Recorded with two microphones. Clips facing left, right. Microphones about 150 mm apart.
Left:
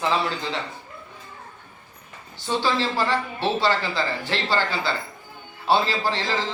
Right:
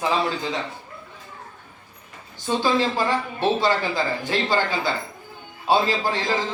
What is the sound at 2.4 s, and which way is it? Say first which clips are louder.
A man's voice: right 2 dB; 15° right (ahead or behind).